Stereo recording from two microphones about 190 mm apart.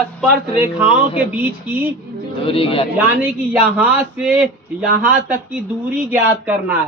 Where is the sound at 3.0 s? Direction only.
10° right (ahead or behind).